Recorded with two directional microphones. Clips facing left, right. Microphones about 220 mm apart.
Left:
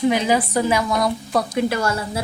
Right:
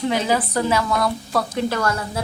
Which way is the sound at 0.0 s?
15° left (ahead or behind).